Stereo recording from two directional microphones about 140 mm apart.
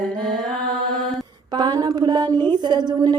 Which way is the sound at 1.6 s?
30° right (ahead or behind).